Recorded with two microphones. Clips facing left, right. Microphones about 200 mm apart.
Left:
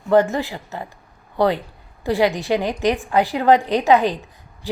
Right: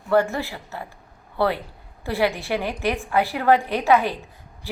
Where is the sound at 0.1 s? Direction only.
20° left (ahead or behind).